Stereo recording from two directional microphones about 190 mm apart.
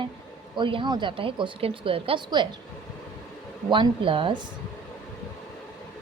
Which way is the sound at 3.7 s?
25° right (ahead or behind).